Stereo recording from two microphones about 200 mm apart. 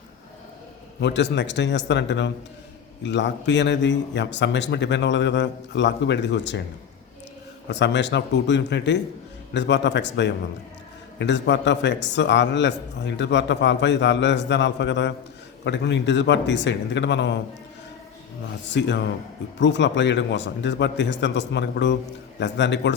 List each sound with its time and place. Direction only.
1.0 s a man's voice: 60° left (ahead or behind)
7.7 s a man's voice: 60° left (ahead or behind)
18.7 s a man's voice: 60° left (ahead or behind)